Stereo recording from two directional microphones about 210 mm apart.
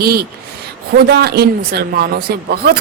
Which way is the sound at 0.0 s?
45° right (ahead or behind).